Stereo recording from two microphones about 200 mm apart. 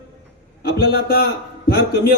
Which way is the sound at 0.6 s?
50° left (ahead or behind).